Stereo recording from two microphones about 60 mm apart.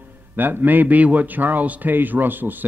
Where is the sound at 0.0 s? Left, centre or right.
Right.